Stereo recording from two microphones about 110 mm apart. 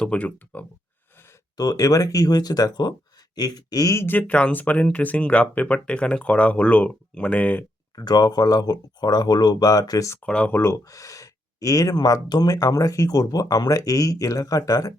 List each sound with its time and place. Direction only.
0.0 s speech: 10° left (ahead or behind)
1.5 s speech: 35° left (ahead or behind)
4.2 s speech: 10° left (ahead or behind)
7.9 s speech: 35° left (ahead or behind)
10.2 s speech: 10° left (ahead or behind)
10.6 s speech: 25° left (ahead or behind)